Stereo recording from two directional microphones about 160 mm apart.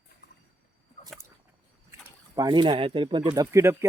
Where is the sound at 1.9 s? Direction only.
20° right (ahead or behind).